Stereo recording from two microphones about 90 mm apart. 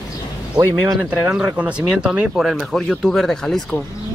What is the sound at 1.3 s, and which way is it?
Speech, 15° right (ahead or behind).